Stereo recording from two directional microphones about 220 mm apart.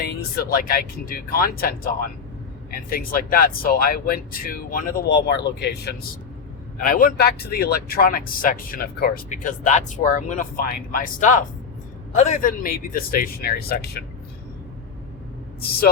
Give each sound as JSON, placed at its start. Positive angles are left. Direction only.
{"t": 0.3, "sound": "speech", "side_deg": 40}